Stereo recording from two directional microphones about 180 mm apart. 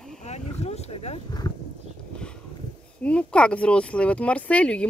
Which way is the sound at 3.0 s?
5° left (ahead or behind).